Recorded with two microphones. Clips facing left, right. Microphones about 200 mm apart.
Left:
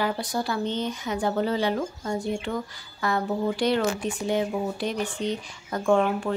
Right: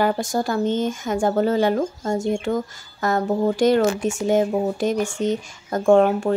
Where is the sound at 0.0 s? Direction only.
45° right (ahead or behind).